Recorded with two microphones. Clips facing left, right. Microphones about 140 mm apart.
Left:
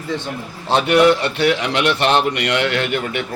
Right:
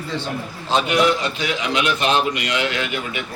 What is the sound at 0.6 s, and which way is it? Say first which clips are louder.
A man's voice: left 5 dB; 65° left (ahead or behind).